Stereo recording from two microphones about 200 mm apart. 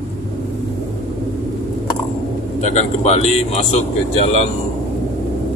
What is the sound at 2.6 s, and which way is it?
A man's voice, 35° left (ahead or behind).